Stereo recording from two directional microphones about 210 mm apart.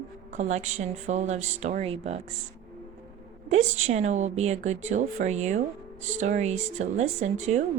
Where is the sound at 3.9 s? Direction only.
35° right (ahead or behind).